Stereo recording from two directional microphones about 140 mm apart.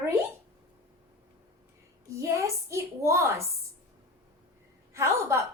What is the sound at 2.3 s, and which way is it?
A woman's voice, 20° right (ahead or behind).